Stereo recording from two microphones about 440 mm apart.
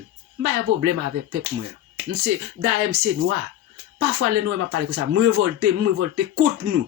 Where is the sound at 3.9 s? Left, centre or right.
Right.